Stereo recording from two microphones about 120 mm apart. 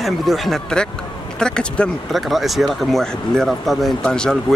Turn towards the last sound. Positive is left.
turn(degrees=5)  # may be behind; listen again after turning